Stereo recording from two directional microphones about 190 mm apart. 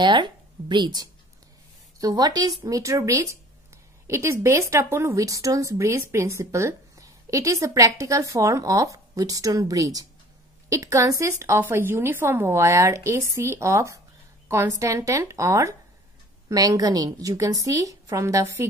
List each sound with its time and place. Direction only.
0.0 s speech: 25° right (ahead or behind)